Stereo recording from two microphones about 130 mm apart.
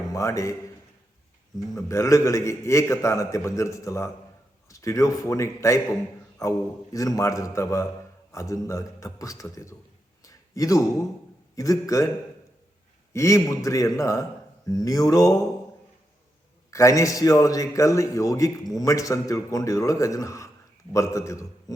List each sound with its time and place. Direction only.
0.1 s a man's voice: 25° left (ahead or behind)
1.7 s a man's voice: 25° left (ahead or behind)
10.2 s a sound: 25° left (ahead or behind)
11.5 s a man's voice: 25° left (ahead or behind)
13.1 s a man's voice: 25° left (ahead or behind)
16.7 s a man's voice: 25° left (ahead or behind)